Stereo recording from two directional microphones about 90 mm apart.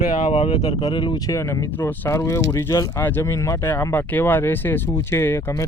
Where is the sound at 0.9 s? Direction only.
60° left (ahead or behind).